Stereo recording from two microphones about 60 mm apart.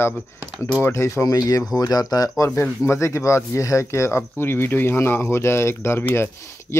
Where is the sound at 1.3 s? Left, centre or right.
Left.